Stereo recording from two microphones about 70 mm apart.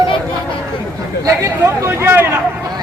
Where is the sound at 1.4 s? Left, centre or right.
Right.